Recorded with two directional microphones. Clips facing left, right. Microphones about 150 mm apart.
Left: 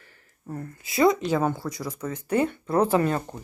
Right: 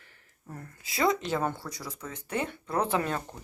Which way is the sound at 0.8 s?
20° left (ahead or behind).